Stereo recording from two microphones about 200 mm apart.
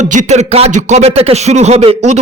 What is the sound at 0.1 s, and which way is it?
Speech, 35° right (ahead or behind).